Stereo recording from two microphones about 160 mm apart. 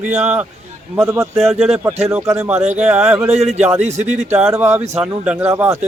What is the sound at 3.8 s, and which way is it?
Speech, 45° right (ahead or behind).